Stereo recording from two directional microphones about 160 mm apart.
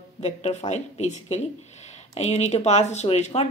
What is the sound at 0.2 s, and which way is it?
A woman's voice, 40° left (ahead or behind).